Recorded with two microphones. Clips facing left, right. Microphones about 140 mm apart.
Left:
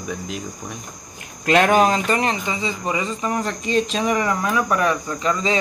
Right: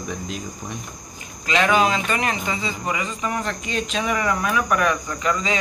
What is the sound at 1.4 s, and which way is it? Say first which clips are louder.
Speech: left 4 dB; 55° left (ahead or behind).